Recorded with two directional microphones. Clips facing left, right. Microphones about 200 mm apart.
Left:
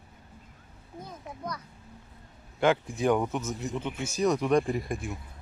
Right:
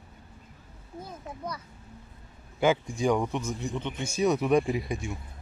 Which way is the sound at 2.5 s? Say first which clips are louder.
Even; centre (ahead or behind).